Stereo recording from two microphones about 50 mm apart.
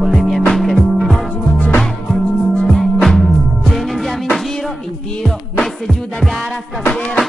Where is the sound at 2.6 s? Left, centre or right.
Centre.